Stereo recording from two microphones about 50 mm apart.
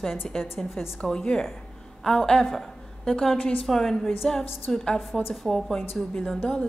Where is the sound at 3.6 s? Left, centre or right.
Centre.